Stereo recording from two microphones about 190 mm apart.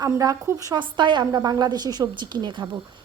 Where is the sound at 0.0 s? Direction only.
20° right (ahead or behind).